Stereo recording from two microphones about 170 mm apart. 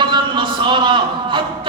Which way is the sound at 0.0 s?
30° right (ahead or behind).